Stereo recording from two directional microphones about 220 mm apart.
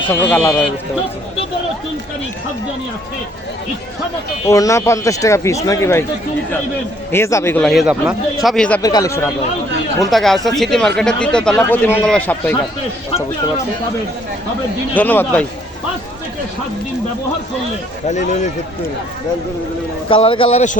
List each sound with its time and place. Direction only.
0.1 s speech: 10° left (ahead or behind)
4.4 s speech: 15° left (ahead or behind)
7.1 s speech: 10° left (ahead or behind)
8.8 s speech: 15° left (ahead or behind)
10.1 s speech: centre (ahead or behind)
14.9 s speech: 10° left (ahead or behind)
18.1 s speech: 35° left (ahead or behind)
20.1 s a man's voice: 25° left (ahead or behind)